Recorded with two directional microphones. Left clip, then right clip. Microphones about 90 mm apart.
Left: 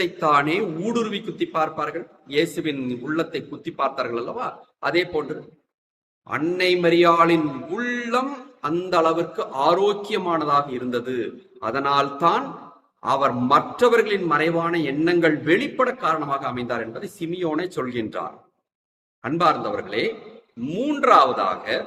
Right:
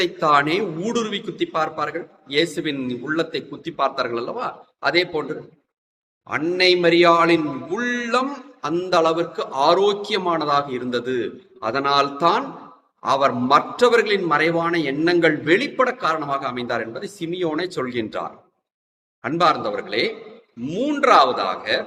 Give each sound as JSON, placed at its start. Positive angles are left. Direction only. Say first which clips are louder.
{"t": 0.0, "sound": "a man's voice", "louder": "right 2 dB", "side_deg": -20}